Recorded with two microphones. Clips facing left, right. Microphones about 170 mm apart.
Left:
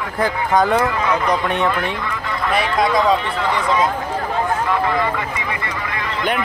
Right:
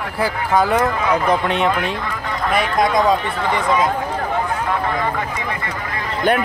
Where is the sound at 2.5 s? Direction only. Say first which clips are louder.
Right 1 dB; 45° right (ahead or behind).